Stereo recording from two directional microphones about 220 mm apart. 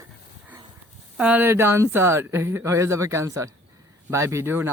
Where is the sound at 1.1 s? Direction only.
5° right (ahead or behind).